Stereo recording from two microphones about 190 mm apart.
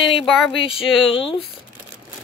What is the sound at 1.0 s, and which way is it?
Speech, 30° left (ahead or behind).